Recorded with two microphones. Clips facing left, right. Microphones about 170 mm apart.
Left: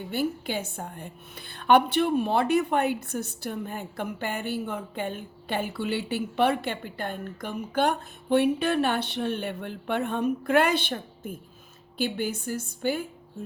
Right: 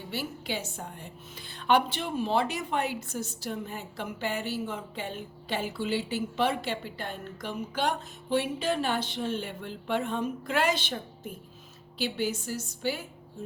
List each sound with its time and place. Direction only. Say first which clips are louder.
0.1 s a woman's voice: left 6 dB; 50° left (ahead or behind)